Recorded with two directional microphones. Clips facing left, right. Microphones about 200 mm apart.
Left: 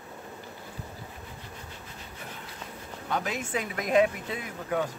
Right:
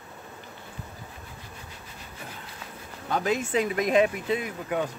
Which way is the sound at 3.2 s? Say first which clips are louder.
Right 7 dB; 25° right (ahead or behind).